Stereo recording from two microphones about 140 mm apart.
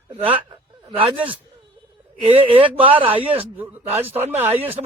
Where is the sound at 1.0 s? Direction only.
40° right (ahead or behind).